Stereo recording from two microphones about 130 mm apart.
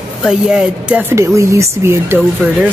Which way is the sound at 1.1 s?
20° right (ahead or behind).